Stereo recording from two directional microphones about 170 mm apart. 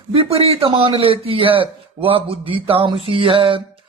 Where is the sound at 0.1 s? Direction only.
35° right (ahead or behind).